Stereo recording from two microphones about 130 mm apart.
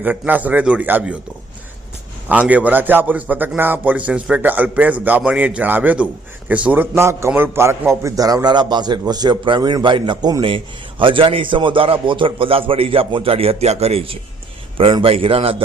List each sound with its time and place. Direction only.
0.0 s a man's voice: 15° right (ahead or behind)
2.5 s a man's voice: 10° right (ahead or behind); by 15.6 s 45° right (ahead or behind)